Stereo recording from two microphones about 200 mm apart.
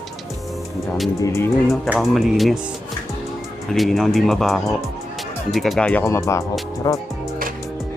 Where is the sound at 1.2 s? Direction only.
15° left (ahead or behind).